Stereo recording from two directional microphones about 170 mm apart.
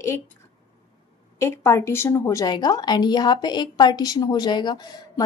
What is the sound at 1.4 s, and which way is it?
A woman's voice, 15° left (ahead or behind).